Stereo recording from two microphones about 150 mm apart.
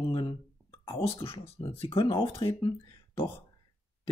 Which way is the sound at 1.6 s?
35° left (ahead or behind).